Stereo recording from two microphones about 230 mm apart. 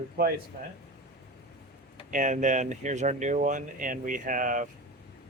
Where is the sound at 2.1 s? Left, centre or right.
Right.